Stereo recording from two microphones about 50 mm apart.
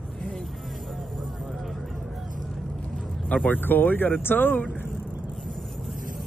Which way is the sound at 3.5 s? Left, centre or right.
Left.